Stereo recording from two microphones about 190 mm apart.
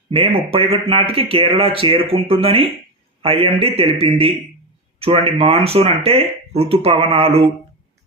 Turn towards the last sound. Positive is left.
turn(degrees=-30)  # may be behind; listen again after turning